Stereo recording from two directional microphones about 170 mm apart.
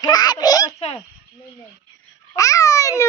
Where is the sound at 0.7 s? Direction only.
40° left (ahead or behind).